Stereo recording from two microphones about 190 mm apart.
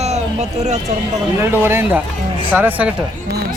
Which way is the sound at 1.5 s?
10° right (ahead or behind).